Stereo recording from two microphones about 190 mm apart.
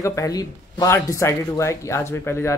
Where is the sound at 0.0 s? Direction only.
15° left (ahead or behind).